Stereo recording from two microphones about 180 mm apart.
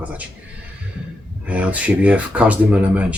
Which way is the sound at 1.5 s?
10° right (ahead or behind).